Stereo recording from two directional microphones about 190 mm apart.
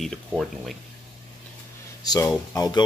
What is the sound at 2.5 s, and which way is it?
Speech, 20° left (ahead or behind).